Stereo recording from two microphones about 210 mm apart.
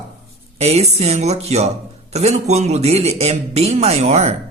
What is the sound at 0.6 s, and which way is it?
A woman's voice, 30° right (ahead or behind).